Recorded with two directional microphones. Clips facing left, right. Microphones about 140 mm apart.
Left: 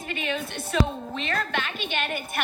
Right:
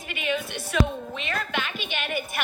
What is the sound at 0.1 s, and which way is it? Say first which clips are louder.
Music: right 2 dB; 40° left (ahead or behind).